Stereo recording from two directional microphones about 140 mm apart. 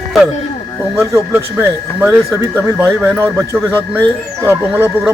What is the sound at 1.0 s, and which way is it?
Speech, 20° right (ahead or behind).